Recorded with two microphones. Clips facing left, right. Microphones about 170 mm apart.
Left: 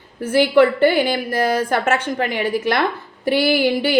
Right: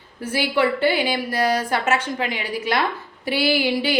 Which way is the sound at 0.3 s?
50° left (ahead or behind).